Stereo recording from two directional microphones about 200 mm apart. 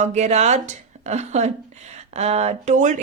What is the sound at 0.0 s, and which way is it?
A woman's voice, 35° right (ahead or behind).